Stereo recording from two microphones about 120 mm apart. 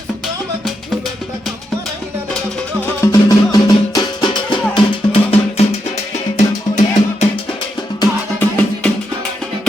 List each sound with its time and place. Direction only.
2.8 s music: 30° left (ahead or behind)
5.1 s music: 55° left (ahead or behind)
6.3 s music: 90° left
8.4 s music: 15° left (ahead or behind)